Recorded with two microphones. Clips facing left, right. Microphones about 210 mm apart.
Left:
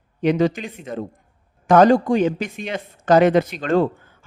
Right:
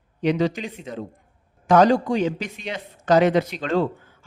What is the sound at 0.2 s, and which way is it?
Speech, 50° left (ahead or behind).